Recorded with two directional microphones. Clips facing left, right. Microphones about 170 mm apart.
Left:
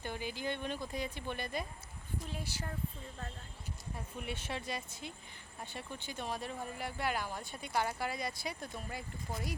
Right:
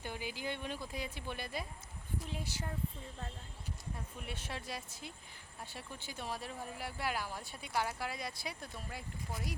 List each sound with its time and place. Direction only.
0.0 s speech: 10° right (ahead or behind)
2.4 s speech: 20° right (ahead or behind)
4.2 s speech: centre (ahead or behind)